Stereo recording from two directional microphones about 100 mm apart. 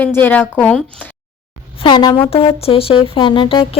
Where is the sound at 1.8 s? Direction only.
50° left (ahead or behind).